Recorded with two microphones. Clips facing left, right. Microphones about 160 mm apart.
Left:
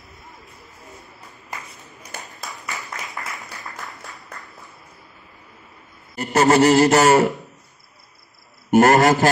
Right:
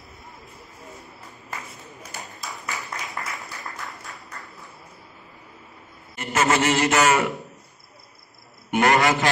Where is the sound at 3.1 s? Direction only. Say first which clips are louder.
Even; centre (ahead or behind).